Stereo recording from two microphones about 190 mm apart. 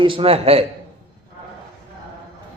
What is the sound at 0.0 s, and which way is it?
Speech, 25° right (ahead or behind).